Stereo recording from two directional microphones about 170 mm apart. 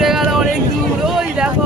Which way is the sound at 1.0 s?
5° right (ahead or behind).